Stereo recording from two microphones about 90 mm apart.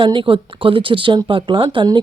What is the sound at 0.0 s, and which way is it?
A woman's voice, 70° right (ahead or behind).